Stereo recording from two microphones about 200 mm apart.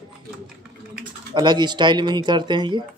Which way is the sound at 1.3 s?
20° right (ahead or behind).